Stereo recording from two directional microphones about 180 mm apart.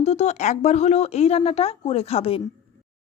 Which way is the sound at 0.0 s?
35° left (ahead or behind).